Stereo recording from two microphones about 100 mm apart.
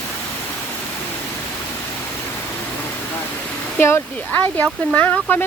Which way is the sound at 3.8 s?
20° left (ahead or behind).